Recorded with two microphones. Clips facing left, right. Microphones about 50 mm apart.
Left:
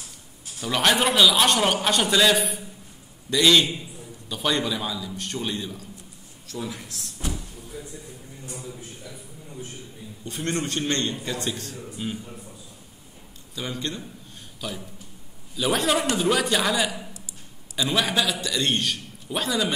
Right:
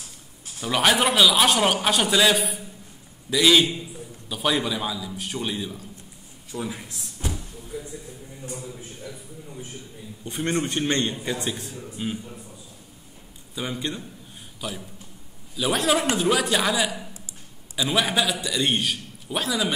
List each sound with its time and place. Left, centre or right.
0.6 s a man's voice: centre
7.2 s a sound: centre
8.6 s a man's voice: centre
10.2 s a man's voice: right
13.6 s a man's voice: centre
14.6 s a man's voice: centre